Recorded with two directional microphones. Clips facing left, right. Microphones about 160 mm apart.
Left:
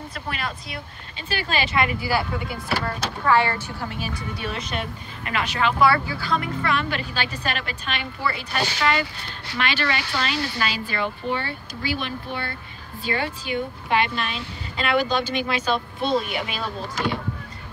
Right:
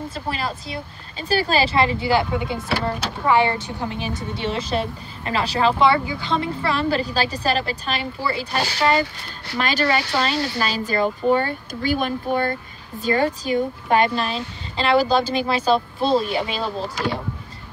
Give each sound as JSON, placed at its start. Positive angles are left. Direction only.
{"t": 0.1, "sound": "speech", "side_deg": -30}
{"t": 5.9, "sound": "speech", "side_deg": -15}